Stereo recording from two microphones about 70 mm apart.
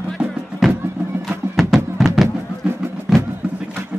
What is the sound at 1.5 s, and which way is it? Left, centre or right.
Music, centre.